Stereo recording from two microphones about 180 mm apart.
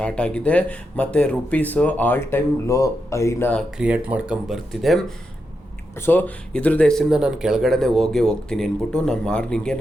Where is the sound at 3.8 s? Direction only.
5° right (ahead or behind).